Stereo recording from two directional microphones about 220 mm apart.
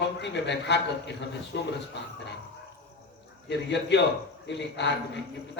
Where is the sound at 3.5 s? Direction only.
50° left (ahead or behind).